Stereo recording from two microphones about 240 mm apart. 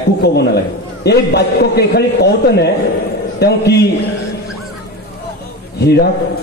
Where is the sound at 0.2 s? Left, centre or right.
Left.